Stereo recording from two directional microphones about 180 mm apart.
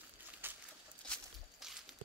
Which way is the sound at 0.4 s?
10° right (ahead or behind).